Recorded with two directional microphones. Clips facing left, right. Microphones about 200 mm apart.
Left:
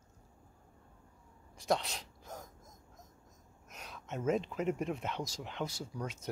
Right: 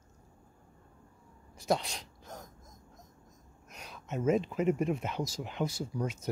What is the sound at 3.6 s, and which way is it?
Speech, centre (ahead or behind).